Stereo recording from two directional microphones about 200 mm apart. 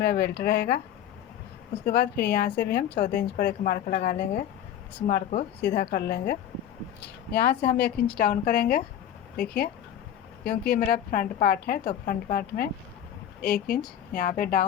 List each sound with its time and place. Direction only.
0.0 s speech: 55° left (ahead or behind)
1.8 s a woman's voice: 55° left (ahead or behind)
5.6 s a woman's voice: 55° left (ahead or behind)
13.4 s a woman's voice: 50° left (ahead or behind)